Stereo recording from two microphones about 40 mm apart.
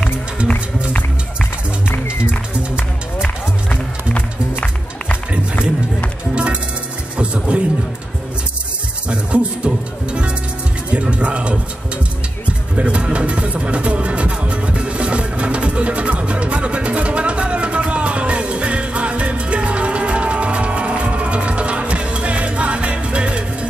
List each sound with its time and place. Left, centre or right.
6.3 s music: right
9.1 s music: right
10.9 s music: right
12.7 s music: right